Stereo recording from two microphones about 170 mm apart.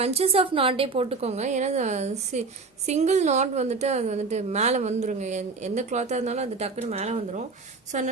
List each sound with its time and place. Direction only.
0.0 s a woman's voice: 35° right (ahead or behind)